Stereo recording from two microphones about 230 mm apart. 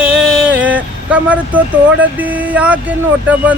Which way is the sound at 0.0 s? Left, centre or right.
Centre.